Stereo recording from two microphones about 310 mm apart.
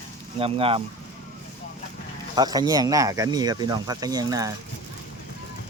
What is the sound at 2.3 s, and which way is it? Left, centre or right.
Speech, centre.